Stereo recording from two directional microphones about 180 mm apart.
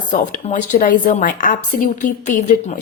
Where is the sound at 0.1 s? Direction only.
45° left (ahead or behind).